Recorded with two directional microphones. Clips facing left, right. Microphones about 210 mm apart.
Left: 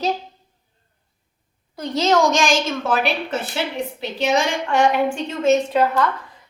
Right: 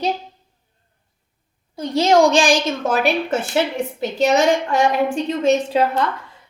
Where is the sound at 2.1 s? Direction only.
30° right (ahead or behind).